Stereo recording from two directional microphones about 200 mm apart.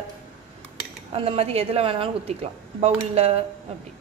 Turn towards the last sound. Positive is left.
turn(degrees=-30)  # may be behind; listen again after turning